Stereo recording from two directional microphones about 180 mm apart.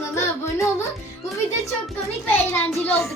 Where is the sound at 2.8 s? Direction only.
5° left (ahead or behind).